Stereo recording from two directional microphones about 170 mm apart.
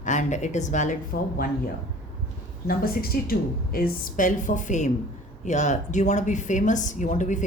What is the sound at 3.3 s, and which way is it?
Speech, 55° left (ahead or behind).